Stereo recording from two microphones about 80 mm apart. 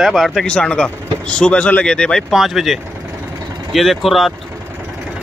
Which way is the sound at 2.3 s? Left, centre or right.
Centre.